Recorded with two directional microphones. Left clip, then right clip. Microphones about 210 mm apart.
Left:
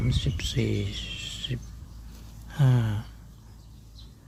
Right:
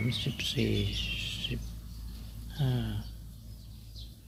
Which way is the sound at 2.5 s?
35° left (ahead or behind).